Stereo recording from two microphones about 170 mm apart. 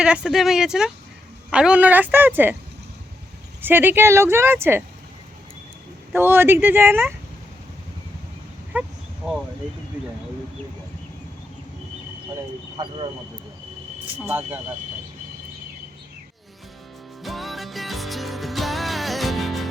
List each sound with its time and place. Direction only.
0.0 s speech: 5° right (ahead or behind)
3.6 s speech: 10° right (ahead or behind)
6.1 s speech: 15° right (ahead or behind)
8.7 s a sound: 10° right (ahead or behind)
12.7 s speech: 25° right (ahead or behind)
14.3 s speech: 10° right (ahead or behind)
17.2 s music: centre (ahead or behind)